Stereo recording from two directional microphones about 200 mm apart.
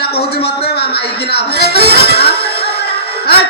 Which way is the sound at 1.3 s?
55° left (ahead or behind).